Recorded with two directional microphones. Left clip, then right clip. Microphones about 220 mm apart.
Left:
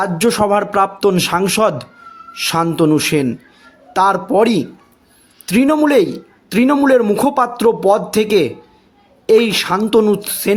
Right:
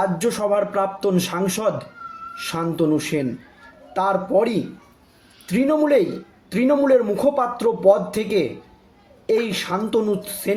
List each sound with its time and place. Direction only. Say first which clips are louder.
0.0 s a man's voice: left 6 dB; 45° left (ahead or behind)